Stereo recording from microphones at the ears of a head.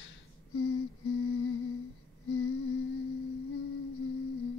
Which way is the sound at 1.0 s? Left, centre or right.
Left.